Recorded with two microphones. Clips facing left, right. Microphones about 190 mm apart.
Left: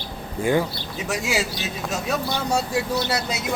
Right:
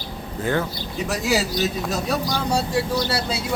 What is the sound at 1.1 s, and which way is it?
Speech, 40° right (ahead or behind).